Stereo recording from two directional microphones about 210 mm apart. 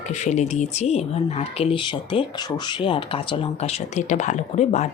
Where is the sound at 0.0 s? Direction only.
35° left (ahead or behind).